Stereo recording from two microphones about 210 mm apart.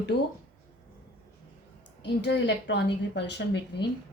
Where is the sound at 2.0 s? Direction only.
55° left (ahead or behind).